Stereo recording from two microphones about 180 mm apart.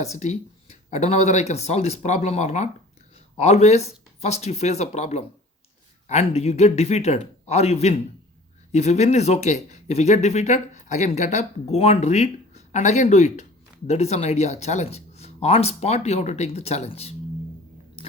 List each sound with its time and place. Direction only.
0.0 s speech: 40° left (ahead or behind)